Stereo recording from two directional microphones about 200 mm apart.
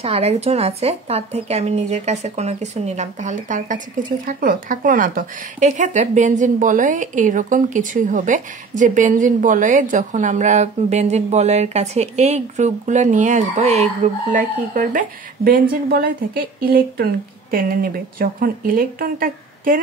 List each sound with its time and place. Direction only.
0.0 s a woman's voice: 30° right (ahead or behind)